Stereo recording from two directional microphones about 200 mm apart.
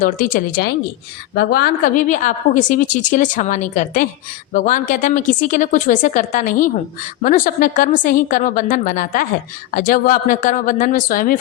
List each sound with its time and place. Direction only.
0.0 s a woman's voice: 45° left (ahead or behind)